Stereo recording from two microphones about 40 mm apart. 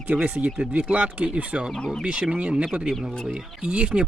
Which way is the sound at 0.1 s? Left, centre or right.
Right.